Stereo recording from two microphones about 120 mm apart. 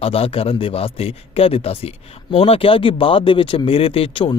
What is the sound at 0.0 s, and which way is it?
Speech, 50° left (ahead or behind).